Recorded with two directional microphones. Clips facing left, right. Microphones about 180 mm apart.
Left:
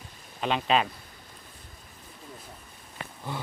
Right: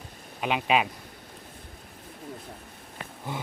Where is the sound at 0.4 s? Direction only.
10° right (ahead or behind).